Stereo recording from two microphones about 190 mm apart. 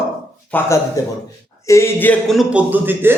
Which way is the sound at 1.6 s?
15° left (ahead or behind).